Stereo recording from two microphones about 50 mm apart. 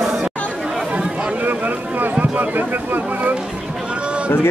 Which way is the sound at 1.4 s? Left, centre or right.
Right.